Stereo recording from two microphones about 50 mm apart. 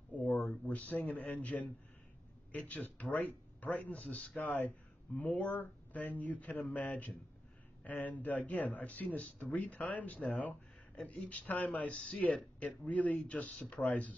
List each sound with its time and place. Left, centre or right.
0.1 s a man's voice: left
2.7 s speech: left
7.8 s speech: left